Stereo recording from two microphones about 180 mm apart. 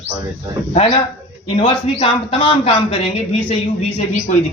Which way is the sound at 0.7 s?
35° left (ahead or behind).